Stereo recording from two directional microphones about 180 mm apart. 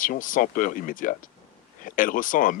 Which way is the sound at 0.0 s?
50° left (ahead or behind).